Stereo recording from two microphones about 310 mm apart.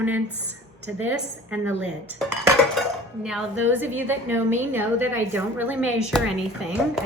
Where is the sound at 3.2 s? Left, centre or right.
Centre.